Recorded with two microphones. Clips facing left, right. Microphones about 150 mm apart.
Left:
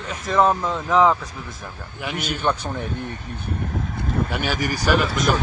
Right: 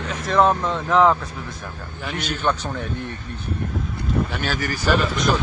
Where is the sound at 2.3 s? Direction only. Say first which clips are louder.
Even; 10° left (ahead or behind).